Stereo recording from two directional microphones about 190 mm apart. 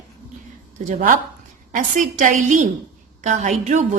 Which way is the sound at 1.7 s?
45° right (ahead or behind).